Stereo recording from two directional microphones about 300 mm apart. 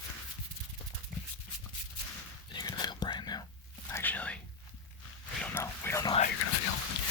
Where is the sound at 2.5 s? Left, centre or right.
Centre.